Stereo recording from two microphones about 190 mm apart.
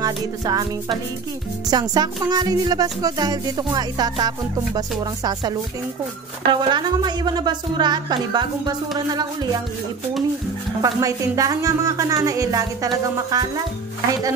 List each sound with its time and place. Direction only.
0.0 s a woman's voice: 20° right (ahead or behind)
10.8 s a woman's voice: 15° right (ahead or behind)